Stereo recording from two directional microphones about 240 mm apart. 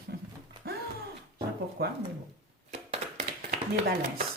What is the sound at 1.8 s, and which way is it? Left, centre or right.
Speech, right.